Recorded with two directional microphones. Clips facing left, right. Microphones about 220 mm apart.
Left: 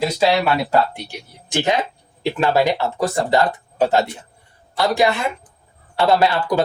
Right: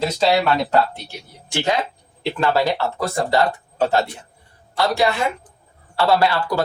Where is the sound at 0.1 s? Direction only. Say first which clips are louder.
Even; 10° left (ahead or behind).